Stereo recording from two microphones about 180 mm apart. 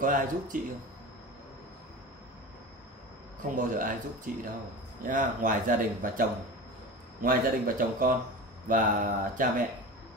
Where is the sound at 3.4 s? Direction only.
45° right (ahead or behind).